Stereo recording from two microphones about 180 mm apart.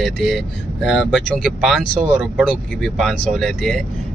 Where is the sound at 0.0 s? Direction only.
Centre (ahead or behind).